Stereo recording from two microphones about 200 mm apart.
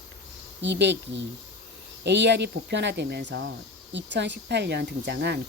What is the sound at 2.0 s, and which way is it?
Speech, 60° right (ahead or behind).